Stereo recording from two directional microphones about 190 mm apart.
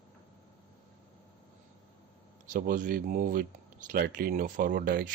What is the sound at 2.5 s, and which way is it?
Speech, 45° right (ahead or behind).